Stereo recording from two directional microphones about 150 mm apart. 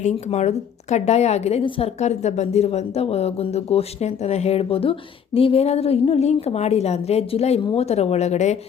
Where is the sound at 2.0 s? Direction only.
50° left (ahead or behind).